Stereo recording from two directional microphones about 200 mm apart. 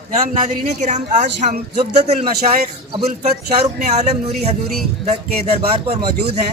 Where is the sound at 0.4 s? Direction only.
35° right (ahead or behind).